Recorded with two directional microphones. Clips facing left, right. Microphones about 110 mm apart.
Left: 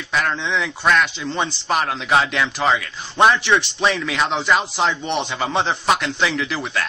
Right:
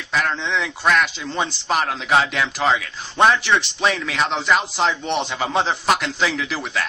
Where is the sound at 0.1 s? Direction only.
Centre (ahead or behind).